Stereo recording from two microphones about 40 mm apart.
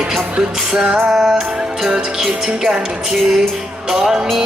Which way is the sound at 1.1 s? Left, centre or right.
Centre.